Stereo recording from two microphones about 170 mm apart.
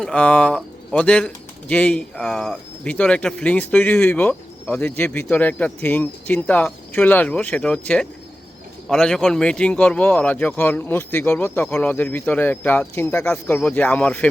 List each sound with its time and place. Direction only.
0.0 s speech: 5° left (ahead or behind)